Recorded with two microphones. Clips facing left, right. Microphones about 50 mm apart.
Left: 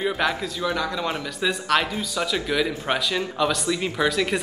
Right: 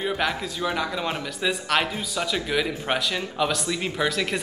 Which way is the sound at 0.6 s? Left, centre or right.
Centre.